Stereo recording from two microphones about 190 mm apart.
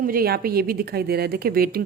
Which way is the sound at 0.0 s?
50° right (ahead or behind).